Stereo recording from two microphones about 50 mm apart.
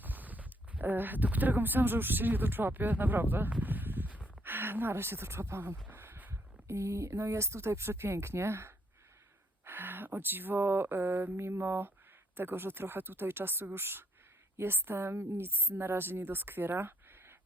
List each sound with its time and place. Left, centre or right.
0.0 s speech: right
3.6 s a sound: right
4.4 s speech: right
5.9 s a sound: right
6.7 s speech: right
9.6 s a woman's voice: right